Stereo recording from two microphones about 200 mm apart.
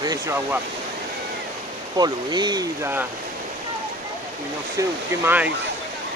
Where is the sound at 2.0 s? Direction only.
20° right (ahead or behind).